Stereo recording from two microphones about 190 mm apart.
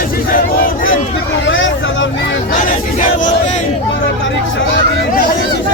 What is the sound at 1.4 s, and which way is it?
Vehicle, 85° left.